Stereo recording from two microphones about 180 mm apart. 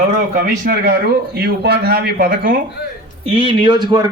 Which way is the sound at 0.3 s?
50° right (ahead or behind).